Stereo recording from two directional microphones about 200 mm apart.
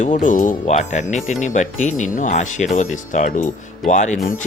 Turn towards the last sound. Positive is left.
turn(degrees=35)  # may be behind; listen again after turning